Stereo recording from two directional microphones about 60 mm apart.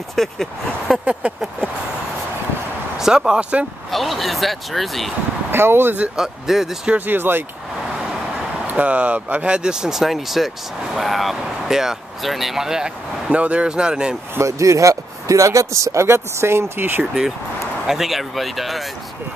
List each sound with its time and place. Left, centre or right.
0.1 s speech: centre
3.0 s speech: centre
3.9 s speech: centre
5.5 s speech: right
6.1 s speech: centre
7.1 s speech: right
8.6 s speech: right
13.3 s speech: right
14.4 s speech: right
17.0 s speech: centre